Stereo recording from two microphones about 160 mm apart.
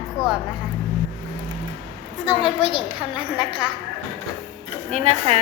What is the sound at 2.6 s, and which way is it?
Speech, 35° left (ahead or behind).